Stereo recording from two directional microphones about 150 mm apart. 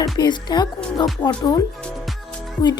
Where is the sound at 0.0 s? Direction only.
30° left (ahead or behind).